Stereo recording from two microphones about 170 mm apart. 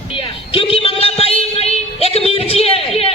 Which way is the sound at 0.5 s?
30° left (ahead or behind).